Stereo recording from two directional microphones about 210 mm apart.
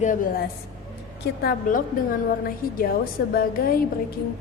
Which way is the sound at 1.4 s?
40° left (ahead or behind).